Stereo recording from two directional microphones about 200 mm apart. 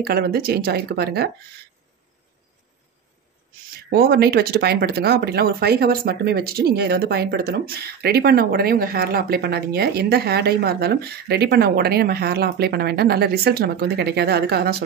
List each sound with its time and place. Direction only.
0.0 s speech: 50° right (ahead or behind)
3.9 s speech: 50° right (ahead or behind)